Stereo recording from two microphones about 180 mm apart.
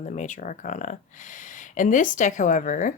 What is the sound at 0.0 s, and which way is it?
Speech, 40° left (ahead or behind).